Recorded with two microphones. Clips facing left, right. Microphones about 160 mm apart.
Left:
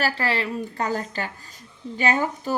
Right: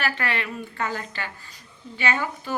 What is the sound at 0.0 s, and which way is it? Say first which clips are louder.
A woman's voice: left 3 dB; 30° left (ahead or behind).